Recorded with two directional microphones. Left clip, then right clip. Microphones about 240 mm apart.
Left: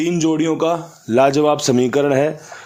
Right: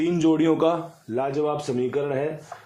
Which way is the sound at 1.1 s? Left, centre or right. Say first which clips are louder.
Left 11 dB; left.